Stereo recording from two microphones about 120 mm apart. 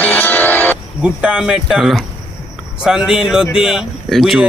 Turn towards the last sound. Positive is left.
turn(degrees=0)  # may be behind; listen again after turning